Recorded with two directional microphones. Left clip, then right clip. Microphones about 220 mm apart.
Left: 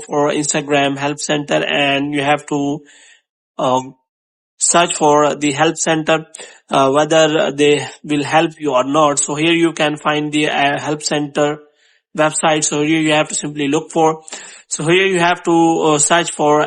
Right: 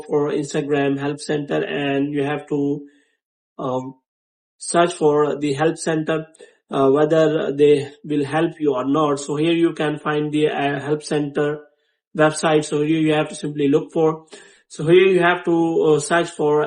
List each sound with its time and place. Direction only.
0.1 s speech: 35° left (ahead or behind)
4.9 s speech: 40° left (ahead or behind)